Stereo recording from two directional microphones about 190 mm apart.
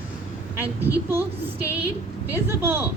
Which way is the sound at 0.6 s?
10° right (ahead or behind).